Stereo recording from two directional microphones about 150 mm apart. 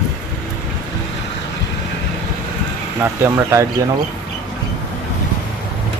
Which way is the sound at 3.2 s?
20° right (ahead or behind).